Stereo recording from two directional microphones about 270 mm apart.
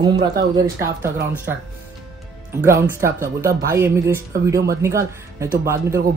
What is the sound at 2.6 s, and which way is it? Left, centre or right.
Speech, centre.